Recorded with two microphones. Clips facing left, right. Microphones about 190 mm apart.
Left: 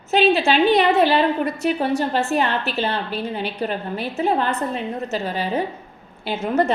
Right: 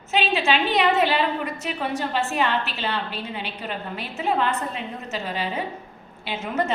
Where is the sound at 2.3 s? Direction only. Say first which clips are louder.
Left 3 dB; 40° left (ahead or behind).